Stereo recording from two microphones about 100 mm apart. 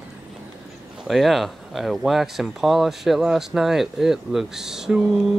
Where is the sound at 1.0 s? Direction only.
Centre (ahead or behind).